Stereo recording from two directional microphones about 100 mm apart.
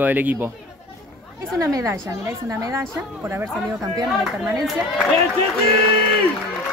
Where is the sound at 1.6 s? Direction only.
35° right (ahead or behind).